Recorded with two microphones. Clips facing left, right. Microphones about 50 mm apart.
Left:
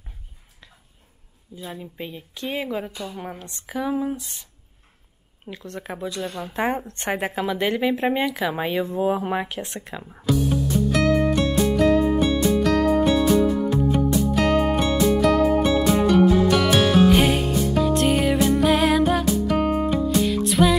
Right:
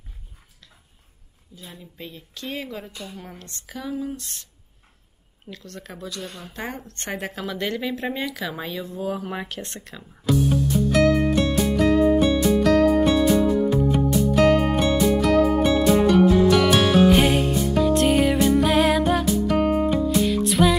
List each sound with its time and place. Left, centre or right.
1.5 s a woman's voice: centre
3.9 s a woman's voice: left
4.2 s speech: centre
5.5 s a woman's voice: left
9.3 s speech: centre
10.2 s music: centre